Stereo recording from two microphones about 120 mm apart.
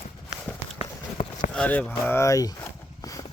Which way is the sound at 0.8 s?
60° left (ahead or behind).